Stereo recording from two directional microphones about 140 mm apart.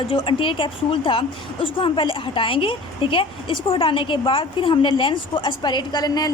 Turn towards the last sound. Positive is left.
turn(degrees=30)  # may be behind; listen again after turning